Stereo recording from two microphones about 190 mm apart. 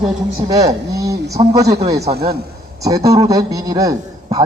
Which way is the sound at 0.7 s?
15° right (ahead or behind).